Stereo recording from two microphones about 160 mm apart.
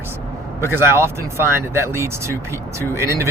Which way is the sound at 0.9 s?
15° right (ahead or behind).